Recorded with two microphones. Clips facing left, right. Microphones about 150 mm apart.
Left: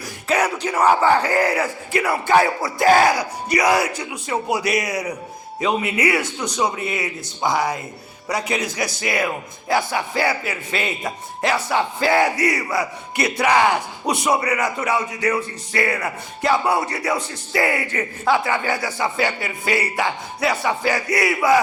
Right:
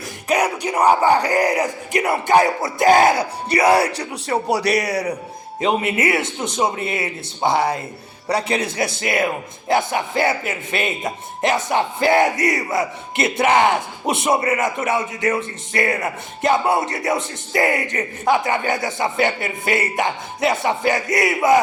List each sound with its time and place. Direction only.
0.3 s crowd: 15° right (ahead or behind)
2.0 s speech: 20° right (ahead or behind)